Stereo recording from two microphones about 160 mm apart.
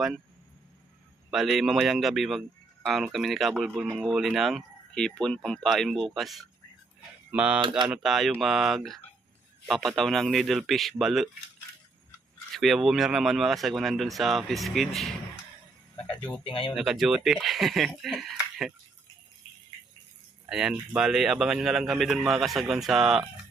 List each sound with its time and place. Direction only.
1.3 s speech: centre (ahead or behind)
12.5 s speech: centre (ahead or behind)
16.4 s speech: 30° left (ahead or behind)
16.7 s speech: centre (ahead or behind)
20.5 s speech: 5° right (ahead or behind)